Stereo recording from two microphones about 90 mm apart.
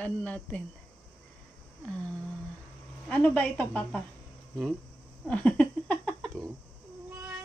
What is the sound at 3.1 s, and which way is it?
Speech, 15° left (ahead or behind).